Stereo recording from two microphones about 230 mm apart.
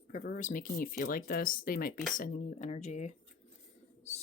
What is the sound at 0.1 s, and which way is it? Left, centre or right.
Speech, left.